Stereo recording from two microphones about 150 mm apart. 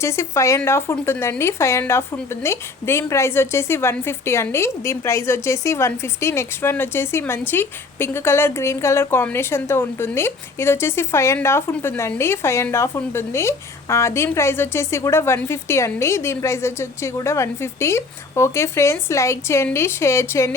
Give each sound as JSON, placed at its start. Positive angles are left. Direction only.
{"t": 0.0, "sound": "a woman's voice", "side_deg": 20}